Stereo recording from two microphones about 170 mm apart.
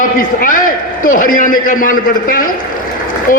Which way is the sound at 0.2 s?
55° left (ahead or behind).